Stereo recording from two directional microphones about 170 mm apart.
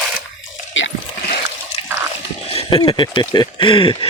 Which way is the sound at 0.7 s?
90° left.